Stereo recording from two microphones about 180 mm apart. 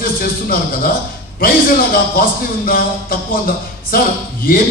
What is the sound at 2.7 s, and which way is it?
A man's voice, 55° left (ahead or behind).